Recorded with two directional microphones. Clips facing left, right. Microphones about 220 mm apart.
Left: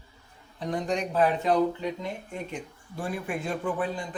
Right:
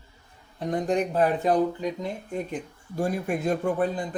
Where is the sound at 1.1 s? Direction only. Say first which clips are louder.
Left 1 dB; 45° right (ahead or behind).